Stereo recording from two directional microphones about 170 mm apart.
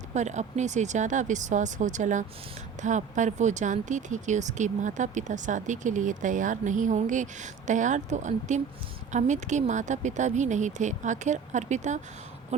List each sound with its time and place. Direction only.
0.1 s speech: 45° right (ahead or behind)